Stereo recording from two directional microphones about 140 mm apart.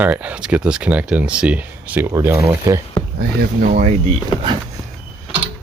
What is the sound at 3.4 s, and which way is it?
Speech, 90° right.